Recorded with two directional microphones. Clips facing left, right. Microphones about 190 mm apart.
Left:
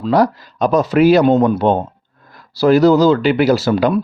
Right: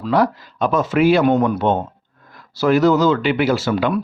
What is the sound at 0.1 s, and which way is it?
Speech, 40° left (ahead or behind).